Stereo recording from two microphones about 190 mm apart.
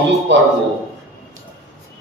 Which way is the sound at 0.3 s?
70° right (ahead or behind).